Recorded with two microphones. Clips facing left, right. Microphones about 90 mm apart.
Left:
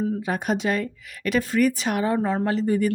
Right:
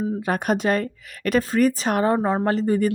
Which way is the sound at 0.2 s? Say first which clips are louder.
Right 3 dB; 55° right (ahead or behind).